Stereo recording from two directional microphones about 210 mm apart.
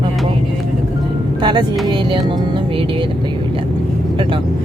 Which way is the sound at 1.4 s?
20° right (ahead or behind).